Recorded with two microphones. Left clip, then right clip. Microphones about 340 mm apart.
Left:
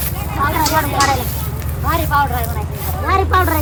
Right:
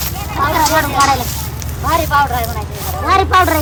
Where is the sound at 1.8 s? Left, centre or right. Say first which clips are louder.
Right 3 dB; right.